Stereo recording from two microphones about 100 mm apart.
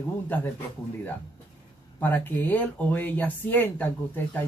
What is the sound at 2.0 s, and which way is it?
Speech, 20° left (ahead or behind).